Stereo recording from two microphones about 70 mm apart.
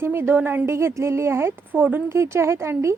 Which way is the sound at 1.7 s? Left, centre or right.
Right.